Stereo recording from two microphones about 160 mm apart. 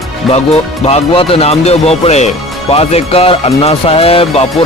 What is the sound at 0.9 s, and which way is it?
Speech, 40° left (ahead or behind).